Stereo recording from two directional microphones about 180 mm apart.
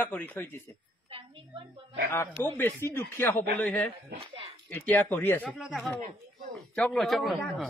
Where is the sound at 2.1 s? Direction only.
15° left (ahead or behind).